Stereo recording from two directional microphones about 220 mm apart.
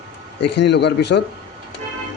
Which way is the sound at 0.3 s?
50° left (ahead or behind).